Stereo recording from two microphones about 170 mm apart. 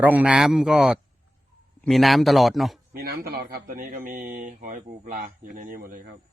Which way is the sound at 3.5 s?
60° right (ahead or behind).